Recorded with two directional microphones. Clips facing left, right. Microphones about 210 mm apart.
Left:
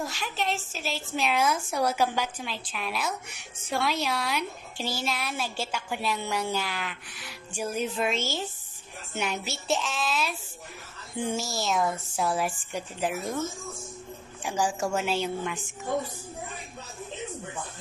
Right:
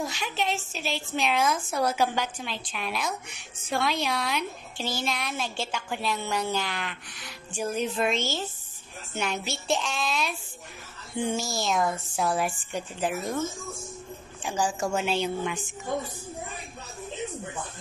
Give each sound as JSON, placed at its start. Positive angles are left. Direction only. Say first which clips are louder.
{"t": 0.0, "sound": "a woman's voice", "louder": "right 1 dB", "side_deg": 0}
{"t": 14.4, "sound": "a woman's voice", "louder": "even", "side_deg": 10}